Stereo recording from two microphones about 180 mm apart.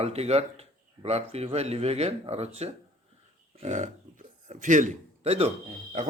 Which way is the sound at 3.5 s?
40° right (ahead or behind).